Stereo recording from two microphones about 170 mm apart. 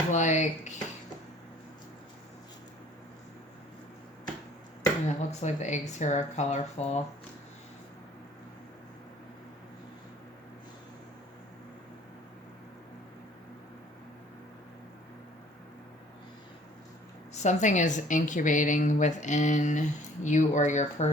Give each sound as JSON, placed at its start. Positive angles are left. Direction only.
{"t": 0.1, "sound": "a woman's voice", "side_deg": 45}
{"t": 5.0, "sound": "a woman's voice", "side_deg": 40}
{"t": 17.3, "sound": "a woman's voice", "side_deg": 45}